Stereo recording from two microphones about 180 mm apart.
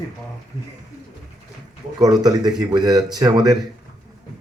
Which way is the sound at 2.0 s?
20° right (ahead or behind).